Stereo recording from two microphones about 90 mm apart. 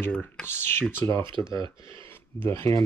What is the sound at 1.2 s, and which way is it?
Speech, 65° right (ahead or behind).